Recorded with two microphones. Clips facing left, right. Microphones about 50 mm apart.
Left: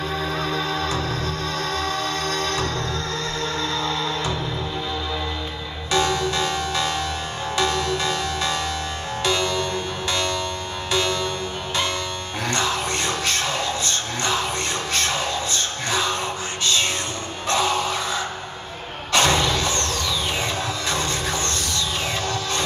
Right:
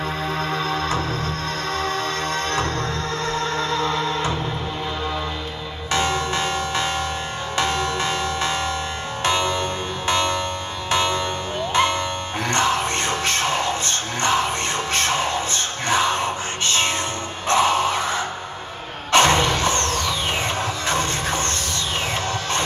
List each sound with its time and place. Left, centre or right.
0.4 s music: right
5.9 s music: right
12.4 s music: right
19.1 s a sound: right
20.9 s train: right